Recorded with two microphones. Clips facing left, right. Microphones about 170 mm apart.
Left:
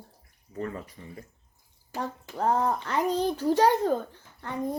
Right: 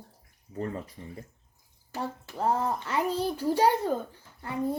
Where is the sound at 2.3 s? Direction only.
5° right (ahead or behind).